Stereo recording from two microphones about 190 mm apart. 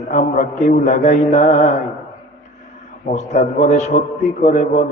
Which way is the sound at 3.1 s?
40° left (ahead or behind).